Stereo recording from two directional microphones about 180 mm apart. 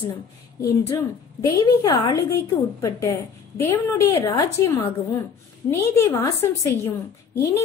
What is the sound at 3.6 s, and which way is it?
A woman's voice, 15° left (ahead or behind).